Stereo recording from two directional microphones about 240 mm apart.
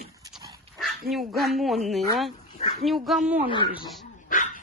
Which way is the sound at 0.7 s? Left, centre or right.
Centre.